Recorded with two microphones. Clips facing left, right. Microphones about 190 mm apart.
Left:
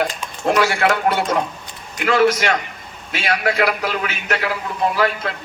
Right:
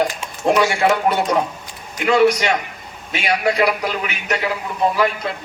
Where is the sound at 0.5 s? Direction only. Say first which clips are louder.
Right 1 dB; 20° right (ahead or behind).